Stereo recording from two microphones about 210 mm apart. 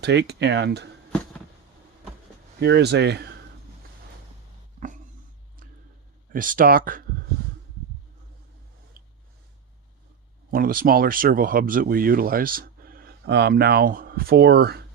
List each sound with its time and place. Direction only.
0.0 s speech: 55° right (ahead or behind)
2.6 s speech: 55° right (ahead or behind)
6.3 s speech: 40° right (ahead or behind)
10.5 s speech: 45° right (ahead or behind)